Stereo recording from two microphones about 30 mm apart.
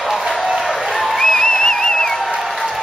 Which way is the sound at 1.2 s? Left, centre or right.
Centre.